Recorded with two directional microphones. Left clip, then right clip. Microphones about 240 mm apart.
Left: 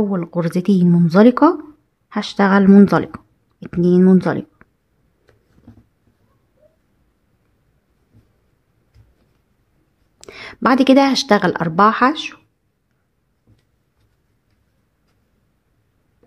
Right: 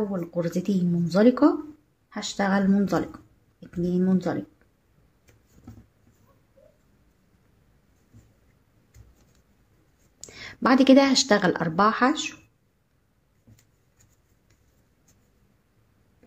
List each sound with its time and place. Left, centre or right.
0.1 s speech: left
10.2 s speech: left